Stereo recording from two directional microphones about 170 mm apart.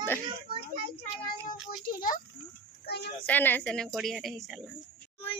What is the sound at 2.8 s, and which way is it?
Speech, 70° left (ahead or behind).